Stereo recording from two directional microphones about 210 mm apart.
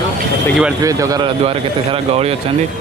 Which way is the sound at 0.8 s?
15° right (ahead or behind).